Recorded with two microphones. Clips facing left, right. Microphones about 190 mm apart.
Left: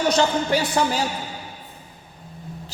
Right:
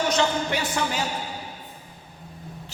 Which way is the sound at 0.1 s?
35° left (ahead or behind).